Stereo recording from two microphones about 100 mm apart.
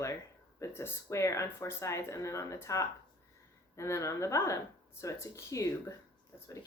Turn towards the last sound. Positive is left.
turn(degrees=25)  # may be behind; listen again after turning